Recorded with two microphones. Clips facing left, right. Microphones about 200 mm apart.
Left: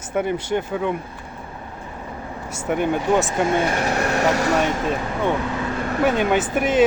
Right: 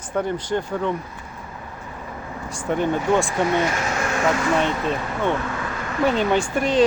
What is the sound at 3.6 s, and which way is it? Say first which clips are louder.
Speech: left 3 dB; 35° left (ahead or behind).